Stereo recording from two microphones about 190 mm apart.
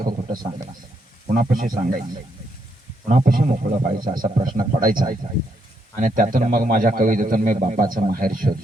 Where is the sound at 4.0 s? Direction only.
20° right (ahead or behind).